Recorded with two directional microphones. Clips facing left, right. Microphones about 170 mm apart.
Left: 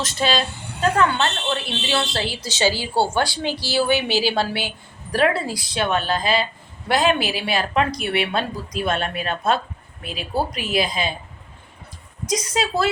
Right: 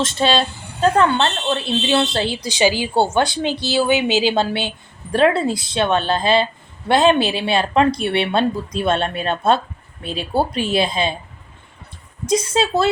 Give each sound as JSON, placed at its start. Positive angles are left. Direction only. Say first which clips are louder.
{"t": 0.0, "sound": "speech", "louder": "right 4 dB", "side_deg": -25}
{"t": 12.2, "sound": "speech", "louder": "right 5 dB", "side_deg": -25}